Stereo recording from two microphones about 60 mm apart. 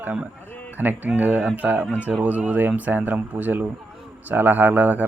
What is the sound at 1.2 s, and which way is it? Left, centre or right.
Speech, centre.